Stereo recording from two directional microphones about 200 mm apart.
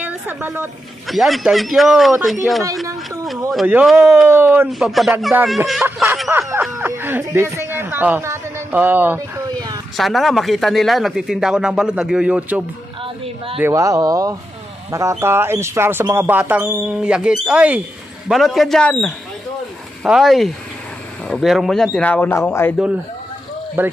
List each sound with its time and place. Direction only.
0.0 s speech: 10° right (ahead or behind)
3.5 s speech: 5° right (ahead or behind)
9.5 s a sound: 20° right (ahead or behind)
9.9 s speech: centre (ahead or behind)
23.8 s speech: 10° right (ahead or behind)